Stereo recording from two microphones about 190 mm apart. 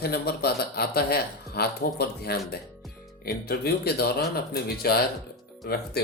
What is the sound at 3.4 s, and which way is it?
A man's voice, 55° left (ahead or behind).